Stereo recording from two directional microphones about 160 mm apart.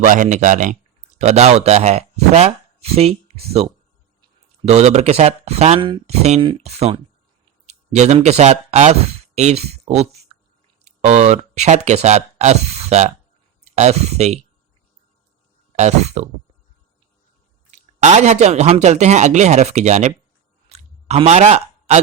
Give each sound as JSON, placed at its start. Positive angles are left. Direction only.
{"t": 0.0, "sound": "speech", "side_deg": -50}
{"t": 15.7, "sound": "speech", "side_deg": -45}
{"t": 17.7, "sound": "speech", "side_deg": -45}
{"t": 20.7, "sound": "chewing", "side_deg": -40}